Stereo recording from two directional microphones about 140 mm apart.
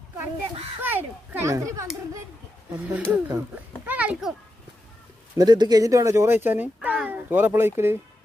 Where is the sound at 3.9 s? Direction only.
10° right (ahead or behind).